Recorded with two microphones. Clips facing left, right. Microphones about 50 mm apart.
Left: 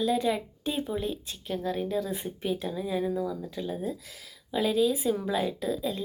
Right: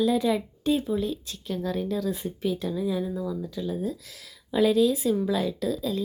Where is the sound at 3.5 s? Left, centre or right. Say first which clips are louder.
Right 3 dB; left.